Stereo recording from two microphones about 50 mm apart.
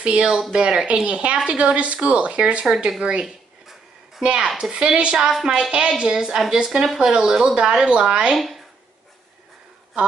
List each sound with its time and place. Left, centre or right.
0.0 s speech: centre
2.6 s a woman's voice: centre